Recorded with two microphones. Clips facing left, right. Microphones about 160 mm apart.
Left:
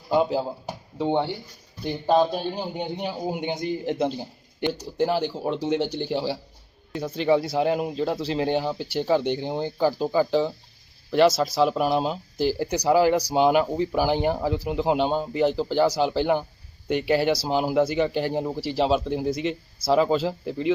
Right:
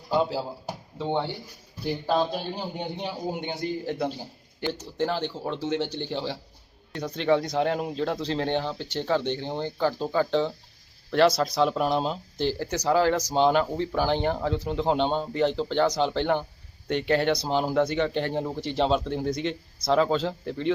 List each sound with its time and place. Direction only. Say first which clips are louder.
0.1 s a sound: left 3 dB; 20° left (ahead or behind)
0.9 s speech: left 4 dB; 15° left (ahead or behind)
3.0 s speech: left 2 dB; 10° left (ahead or behind)